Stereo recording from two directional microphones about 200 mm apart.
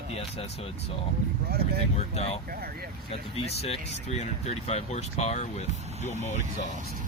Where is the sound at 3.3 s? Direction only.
30° left (ahead or behind).